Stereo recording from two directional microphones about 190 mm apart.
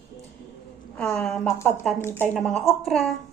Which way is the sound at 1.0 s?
5° left (ahead or behind).